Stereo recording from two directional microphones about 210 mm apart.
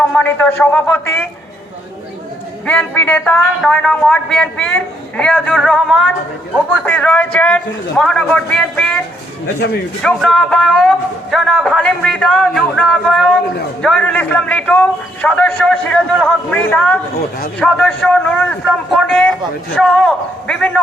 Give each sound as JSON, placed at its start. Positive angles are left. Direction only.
{"t": 0.1, "sound": "a man's voice", "side_deg": 5}
{"t": 2.6, "sound": "a man's voice", "side_deg": 10}
{"t": 9.6, "sound": "a man's voice", "side_deg": 50}
{"t": 10.0, "sound": "a man's voice", "side_deg": 5}